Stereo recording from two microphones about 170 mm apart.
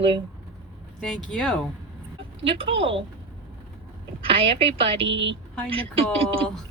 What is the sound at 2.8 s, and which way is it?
Speech, 30° right (ahead or behind).